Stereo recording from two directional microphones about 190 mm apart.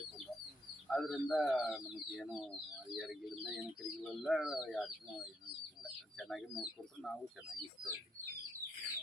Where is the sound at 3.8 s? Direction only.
Centre (ahead or behind).